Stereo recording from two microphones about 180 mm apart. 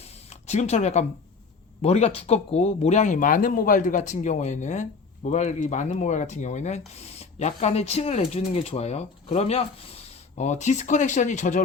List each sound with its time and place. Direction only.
0.3 s speech: 40° left (ahead or behind)